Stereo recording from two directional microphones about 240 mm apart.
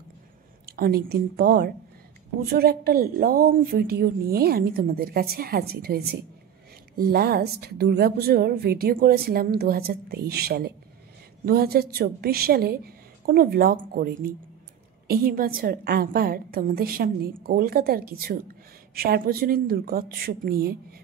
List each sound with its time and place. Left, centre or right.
0.7 s a woman's voice: right